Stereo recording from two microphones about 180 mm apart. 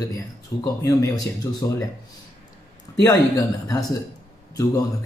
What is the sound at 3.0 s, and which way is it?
Speech, 15° left (ahead or behind).